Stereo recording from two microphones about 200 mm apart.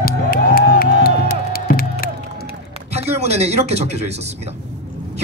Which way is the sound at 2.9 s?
35° right (ahead or behind).